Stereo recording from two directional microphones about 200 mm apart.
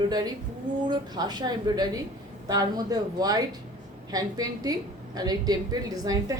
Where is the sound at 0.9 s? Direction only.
20° right (ahead or behind).